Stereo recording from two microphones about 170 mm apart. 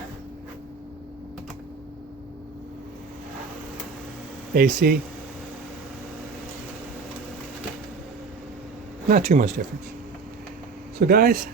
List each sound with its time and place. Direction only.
4.5 s speech: 55° right (ahead or behind)
9.0 s speech: 55° right (ahead or behind)
11.0 s speech: 60° right (ahead or behind)